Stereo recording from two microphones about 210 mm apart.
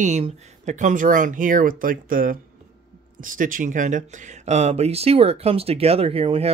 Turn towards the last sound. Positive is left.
turn(degrees=-30)  # may be behind; listen again after turning